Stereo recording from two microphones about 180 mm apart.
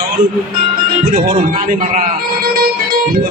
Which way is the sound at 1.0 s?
55° right (ahead or behind).